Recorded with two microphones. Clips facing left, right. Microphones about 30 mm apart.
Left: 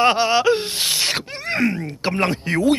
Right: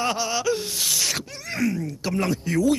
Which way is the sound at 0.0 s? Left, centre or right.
Left.